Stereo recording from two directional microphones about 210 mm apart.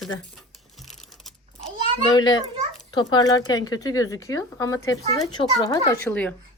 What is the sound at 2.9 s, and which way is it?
Speech, 20° left (ahead or behind).